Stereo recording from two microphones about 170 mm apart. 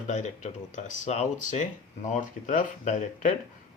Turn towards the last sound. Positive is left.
turn(degrees=45)  # may be behind; listen again after turning